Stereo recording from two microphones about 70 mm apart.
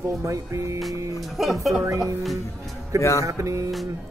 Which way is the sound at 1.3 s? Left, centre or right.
Centre.